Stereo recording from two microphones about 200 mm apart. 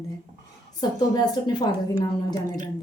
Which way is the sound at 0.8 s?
20° left (ahead or behind).